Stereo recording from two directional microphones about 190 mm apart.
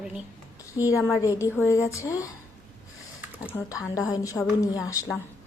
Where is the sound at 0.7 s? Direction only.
15° left (ahead or behind).